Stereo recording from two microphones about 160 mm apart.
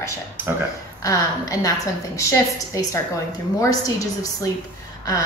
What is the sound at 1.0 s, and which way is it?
Speech, 20° left (ahead or behind).